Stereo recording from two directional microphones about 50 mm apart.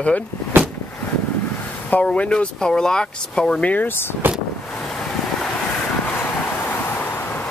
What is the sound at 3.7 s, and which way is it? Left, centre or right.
Speech, left.